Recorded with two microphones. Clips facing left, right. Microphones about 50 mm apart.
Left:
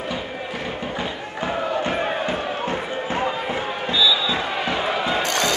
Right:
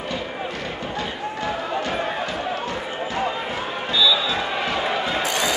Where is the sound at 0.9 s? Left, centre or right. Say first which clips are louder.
Right 1 dB; left.